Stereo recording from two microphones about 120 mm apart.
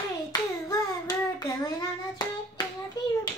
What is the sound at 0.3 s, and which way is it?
Child singing, 30° left (ahead or behind).